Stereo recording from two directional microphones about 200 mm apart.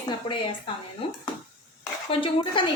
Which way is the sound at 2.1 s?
25° left (ahead or behind).